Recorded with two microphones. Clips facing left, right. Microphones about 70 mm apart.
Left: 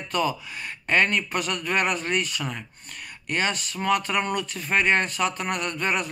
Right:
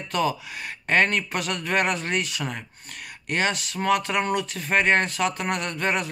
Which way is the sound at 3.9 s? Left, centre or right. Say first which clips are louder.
Right 1 dB; right.